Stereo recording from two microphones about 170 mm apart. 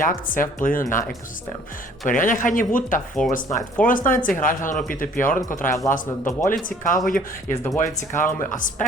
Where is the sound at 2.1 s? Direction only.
50° left (ahead or behind).